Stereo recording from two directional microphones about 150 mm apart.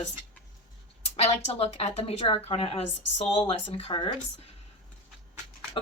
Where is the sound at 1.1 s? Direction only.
40° left (ahead or behind).